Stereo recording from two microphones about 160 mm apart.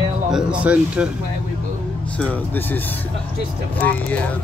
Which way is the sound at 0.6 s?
10° right (ahead or behind).